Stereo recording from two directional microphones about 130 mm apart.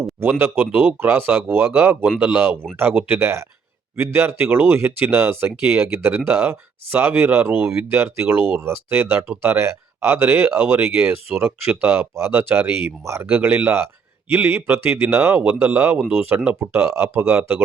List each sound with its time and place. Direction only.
0.0 s speech: 15° right (ahead or behind)